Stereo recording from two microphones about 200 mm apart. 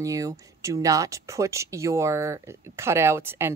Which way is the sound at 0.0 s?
15° right (ahead or behind).